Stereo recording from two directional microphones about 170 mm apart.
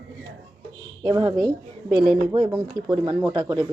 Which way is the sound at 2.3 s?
20° right (ahead or behind).